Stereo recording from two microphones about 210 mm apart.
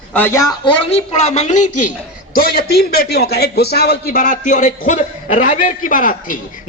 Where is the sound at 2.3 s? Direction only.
45° left (ahead or behind).